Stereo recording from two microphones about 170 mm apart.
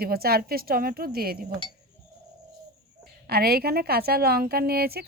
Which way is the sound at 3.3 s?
65° right (ahead or behind).